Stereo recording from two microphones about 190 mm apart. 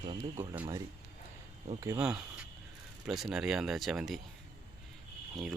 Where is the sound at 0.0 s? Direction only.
25° right (ahead or behind).